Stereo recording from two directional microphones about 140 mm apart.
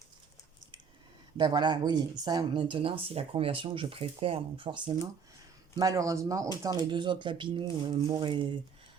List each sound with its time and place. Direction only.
1.4 s speech: 30° right (ahead or behind)
5.7 s speech: 25° right (ahead or behind)